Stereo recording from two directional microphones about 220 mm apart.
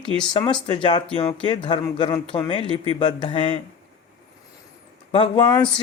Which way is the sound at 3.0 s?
20° left (ahead or behind).